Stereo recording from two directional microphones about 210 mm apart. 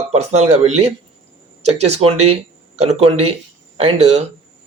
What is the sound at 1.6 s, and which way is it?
Speech, 30° right (ahead or behind).